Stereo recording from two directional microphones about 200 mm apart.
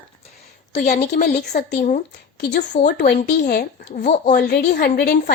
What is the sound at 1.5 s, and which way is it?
Speech, 50° left (ahead or behind).